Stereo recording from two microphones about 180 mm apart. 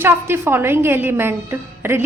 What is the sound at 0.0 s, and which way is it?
A woman's voice, 15° right (ahead or behind).